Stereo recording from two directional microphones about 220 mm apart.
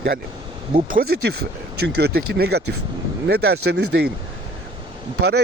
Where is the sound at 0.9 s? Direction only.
40° right (ahead or behind).